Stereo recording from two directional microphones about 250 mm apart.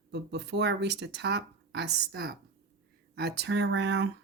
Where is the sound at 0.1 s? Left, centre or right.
Right.